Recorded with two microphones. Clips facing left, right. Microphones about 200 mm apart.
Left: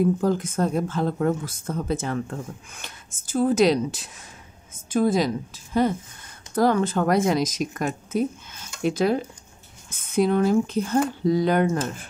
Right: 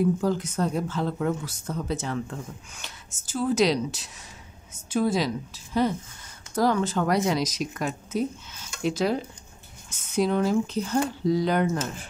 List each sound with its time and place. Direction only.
0.2 s speech: 50° left (ahead or behind)